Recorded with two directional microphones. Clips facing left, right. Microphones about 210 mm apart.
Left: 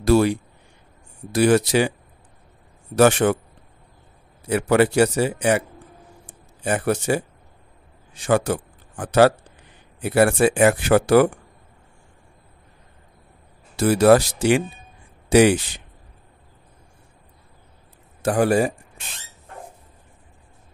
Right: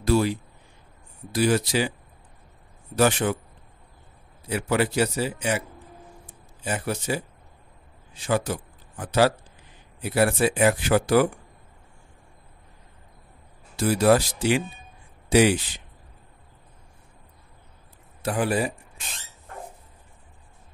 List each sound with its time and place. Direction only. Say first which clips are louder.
0.0 s speech: left 5 dB; 90° left
1.3 s speech: left 5 dB; 70° left (ahead or behind)
3.0 s a man's voice: left 6 dB; 55° left (ahead or behind)
4.5 s a man's voice: left 7 dB; 60° left (ahead or behind)
6.6 s speech: left 7 dB; 70° left (ahead or behind)
8.3 s a sound: left 5 dB; 70° left (ahead or behind)
9.0 s speech: left 5 dB; 60° left (ahead or behind)
11.0 s a man's voice: left 5 dB; 75° left (ahead or behind)
13.7 s a man's voice: left 5 dB; 75° left (ahead or behind)
18.2 s a man's voice: left 6 dB; 45° left (ahead or behind)